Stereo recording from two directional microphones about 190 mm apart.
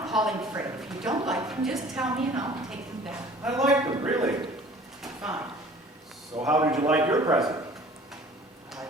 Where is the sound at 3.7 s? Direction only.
20° right (ahead or behind).